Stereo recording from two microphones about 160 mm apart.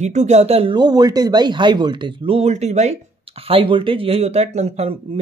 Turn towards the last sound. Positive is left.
turn(degrees=-40)  # may be behind; listen again after turning